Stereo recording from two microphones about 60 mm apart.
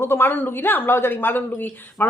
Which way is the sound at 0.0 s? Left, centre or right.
Left.